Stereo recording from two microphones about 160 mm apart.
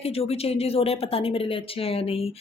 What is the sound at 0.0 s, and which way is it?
Speech, 40° left (ahead or behind).